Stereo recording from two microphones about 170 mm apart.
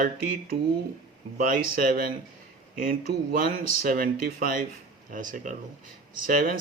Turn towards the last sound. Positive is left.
turn(degrees=-55)  # may be behind; listen again after turning